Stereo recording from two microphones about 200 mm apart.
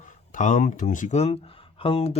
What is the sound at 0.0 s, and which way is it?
Speech, 40° left (ahead or behind).